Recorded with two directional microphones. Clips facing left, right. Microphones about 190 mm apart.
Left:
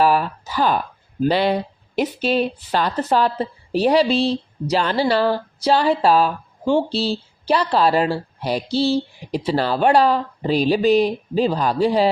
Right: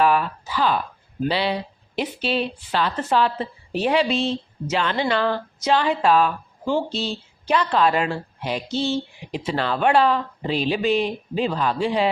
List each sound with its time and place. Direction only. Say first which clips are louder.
0.0 s speech: left 2 dB; 40° left (ahead or behind)